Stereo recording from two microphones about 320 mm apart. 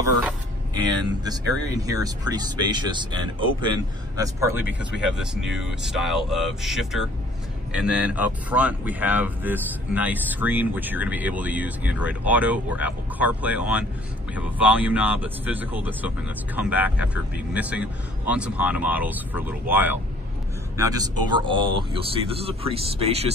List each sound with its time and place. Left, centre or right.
1.9 s speech: centre